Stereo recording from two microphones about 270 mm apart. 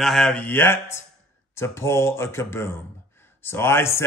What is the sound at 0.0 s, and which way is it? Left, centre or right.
Speech, centre.